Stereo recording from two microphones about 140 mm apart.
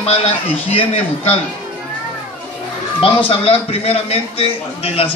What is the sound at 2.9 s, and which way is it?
A man's voice, 40° left (ahead or behind).